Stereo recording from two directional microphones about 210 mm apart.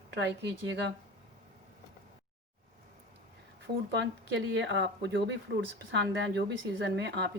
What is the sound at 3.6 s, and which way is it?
Speech, 55° right (ahead or behind).